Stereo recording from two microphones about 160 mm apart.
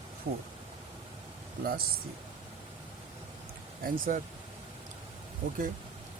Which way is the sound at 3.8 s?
60° right (ahead or behind).